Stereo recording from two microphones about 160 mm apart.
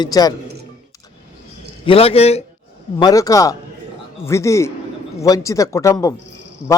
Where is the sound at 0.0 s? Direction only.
25° left (ahead or behind).